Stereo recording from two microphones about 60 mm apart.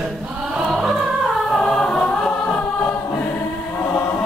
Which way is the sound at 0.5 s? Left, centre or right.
Centre.